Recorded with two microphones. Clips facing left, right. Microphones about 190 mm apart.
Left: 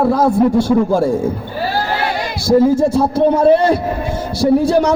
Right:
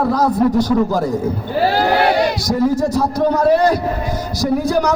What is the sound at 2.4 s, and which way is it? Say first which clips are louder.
A man's voice: left 5 dB; 25° left (ahead or behind).